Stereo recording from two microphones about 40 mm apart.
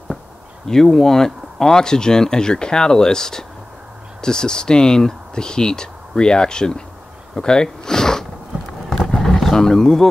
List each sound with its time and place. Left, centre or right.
0.7 s speech: centre
7.3 s a sound: centre
8.9 s roaring cats: centre